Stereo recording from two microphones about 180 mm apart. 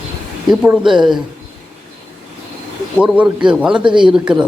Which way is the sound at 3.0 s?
5° right (ahead or behind).